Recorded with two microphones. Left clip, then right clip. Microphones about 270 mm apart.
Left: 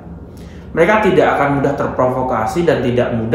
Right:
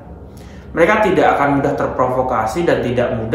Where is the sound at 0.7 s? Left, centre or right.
Centre.